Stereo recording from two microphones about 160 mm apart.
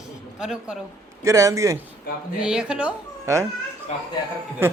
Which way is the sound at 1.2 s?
20° right (ahead or behind).